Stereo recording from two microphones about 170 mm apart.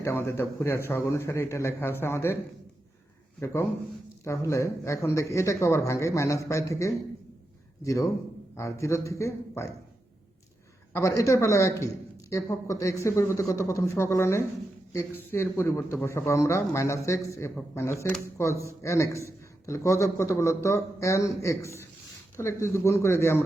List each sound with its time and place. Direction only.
0.0 s a man's voice: 15° left (ahead or behind)
3.4 s a man's voice: 15° left (ahead or behind)
10.9 s a man's voice: 20° left (ahead or behind)